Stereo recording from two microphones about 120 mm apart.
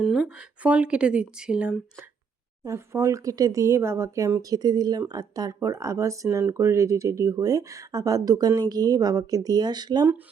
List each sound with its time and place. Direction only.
0.0 s speech: 5° right (ahead or behind)
2.6 s speech: 20° right (ahead or behind)